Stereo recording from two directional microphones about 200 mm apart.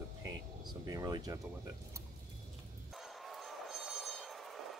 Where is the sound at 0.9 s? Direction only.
20° right (ahead or behind).